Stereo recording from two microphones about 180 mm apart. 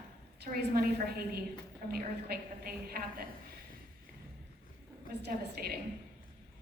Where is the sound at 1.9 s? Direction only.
55° right (ahead or behind).